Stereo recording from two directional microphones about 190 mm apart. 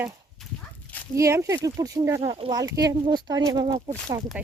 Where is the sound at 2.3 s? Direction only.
30° right (ahead or behind).